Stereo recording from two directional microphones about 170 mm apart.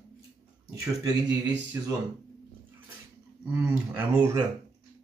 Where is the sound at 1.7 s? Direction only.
20° right (ahead or behind).